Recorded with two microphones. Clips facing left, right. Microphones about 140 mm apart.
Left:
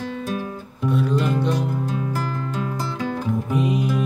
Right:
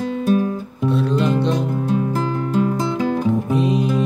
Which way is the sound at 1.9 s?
25° right (ahead or behind).